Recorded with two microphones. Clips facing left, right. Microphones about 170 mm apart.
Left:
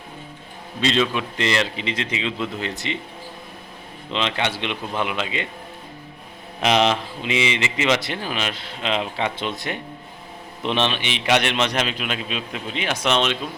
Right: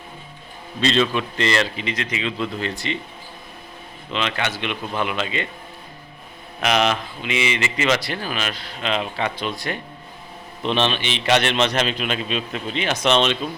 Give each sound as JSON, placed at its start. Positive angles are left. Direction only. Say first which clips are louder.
{"t": 0.8, "sound": "speech", "louder": "right 1 dB", "side_deg": 10}
{"t": 4.1, "sound": "speech", "louder": "left 1 dB", "side_deg": 25}
{"t": 6.6, "sound": "a man's voice", "louder": "left 1 dB", "side_deg": 30}